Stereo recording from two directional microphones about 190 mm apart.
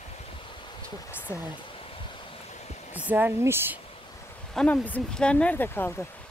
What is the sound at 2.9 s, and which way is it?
Speech, 10° right (ahead or behind).